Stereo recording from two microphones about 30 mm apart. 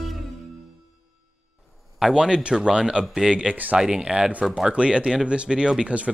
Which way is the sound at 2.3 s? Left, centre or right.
Right.